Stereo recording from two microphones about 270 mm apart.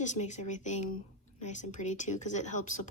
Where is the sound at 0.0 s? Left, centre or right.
Left.